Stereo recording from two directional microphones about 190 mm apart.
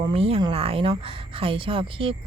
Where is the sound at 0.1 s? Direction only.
30° right (ahead or behind).